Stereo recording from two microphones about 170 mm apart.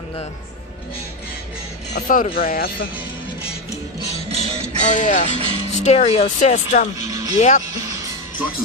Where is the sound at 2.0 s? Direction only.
55° left (ahead or behind).